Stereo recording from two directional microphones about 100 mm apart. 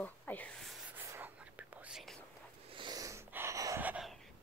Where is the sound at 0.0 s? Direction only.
15° left (ahead or behind).